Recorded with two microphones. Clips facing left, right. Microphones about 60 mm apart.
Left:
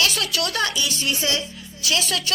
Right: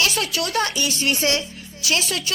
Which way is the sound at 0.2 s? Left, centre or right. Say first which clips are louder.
Right 1 dB; left.